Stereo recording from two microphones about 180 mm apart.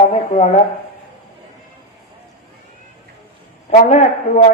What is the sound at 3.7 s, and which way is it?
Speech, 40° left (ahead or behind).